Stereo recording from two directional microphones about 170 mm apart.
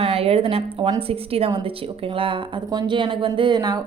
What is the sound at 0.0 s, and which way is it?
A woman's voice, 35° right (ahead or behind).